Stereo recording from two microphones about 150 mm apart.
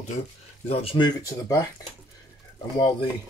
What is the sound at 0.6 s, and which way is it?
Speech, 35° left (ahead or behind).